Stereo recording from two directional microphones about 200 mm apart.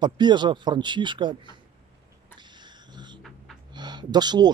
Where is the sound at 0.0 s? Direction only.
20° right (ahead or behind).